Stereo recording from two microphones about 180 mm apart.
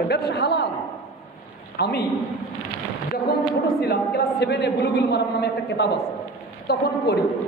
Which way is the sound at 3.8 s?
65° left (ahead or behind).